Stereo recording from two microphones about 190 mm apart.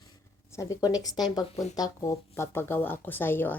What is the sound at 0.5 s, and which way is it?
Speech, 15° left (ahead or behind).